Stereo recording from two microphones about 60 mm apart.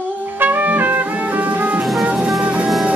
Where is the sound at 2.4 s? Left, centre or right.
Right.